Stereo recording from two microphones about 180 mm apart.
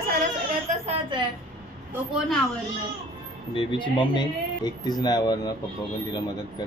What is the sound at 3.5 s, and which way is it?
Speech, 25° left (ahead or behind).